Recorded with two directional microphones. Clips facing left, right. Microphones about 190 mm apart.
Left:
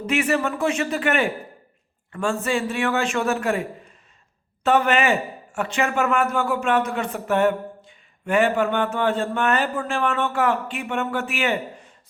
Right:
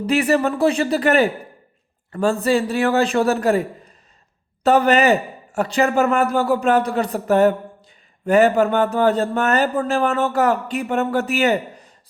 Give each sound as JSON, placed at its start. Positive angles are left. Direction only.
{"t": 0.0, "sound": "speech", "side_deg": -35}